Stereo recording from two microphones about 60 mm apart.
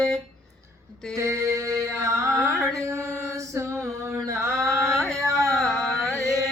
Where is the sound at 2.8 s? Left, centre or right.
Right.